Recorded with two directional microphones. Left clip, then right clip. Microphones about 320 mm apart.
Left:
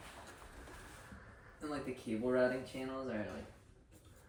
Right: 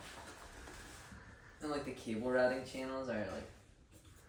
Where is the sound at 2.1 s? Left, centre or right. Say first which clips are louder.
Left 3 dB; centre.